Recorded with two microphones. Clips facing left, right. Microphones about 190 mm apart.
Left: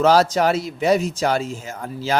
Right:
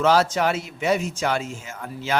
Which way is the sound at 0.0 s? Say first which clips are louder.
Left 3 dB; 40° left (ahead or behind).